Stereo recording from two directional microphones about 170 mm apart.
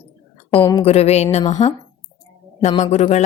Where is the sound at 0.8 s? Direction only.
35° left (ahead or behind).